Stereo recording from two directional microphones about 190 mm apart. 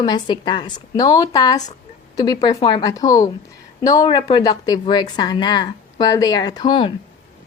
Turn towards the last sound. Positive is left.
turn(degrees=25)  # may be behind; listen again after turning